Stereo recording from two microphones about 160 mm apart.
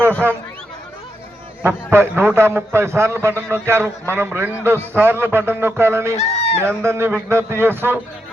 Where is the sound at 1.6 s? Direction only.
15° right (ahead or behind).